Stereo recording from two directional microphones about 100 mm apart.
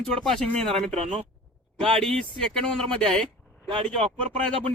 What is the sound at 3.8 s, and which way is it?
Speech, 70° right (ahead or behind).